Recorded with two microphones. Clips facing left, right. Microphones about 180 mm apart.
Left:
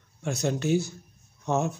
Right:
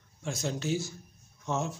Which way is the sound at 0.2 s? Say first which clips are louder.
Left 6 dB; 65° left (ahead or behind).